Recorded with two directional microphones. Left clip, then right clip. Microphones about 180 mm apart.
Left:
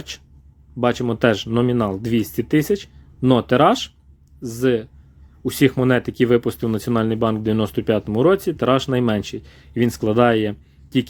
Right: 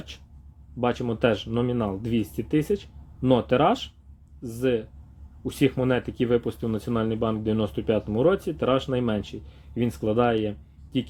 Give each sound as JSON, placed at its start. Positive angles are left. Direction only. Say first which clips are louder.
{"t": 0.1, "sound": "speech", "louder": "left 9 dB", "side_deg": 40}